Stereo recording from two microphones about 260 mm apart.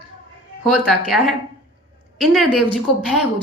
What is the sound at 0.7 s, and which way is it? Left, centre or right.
A woman's voice, centre.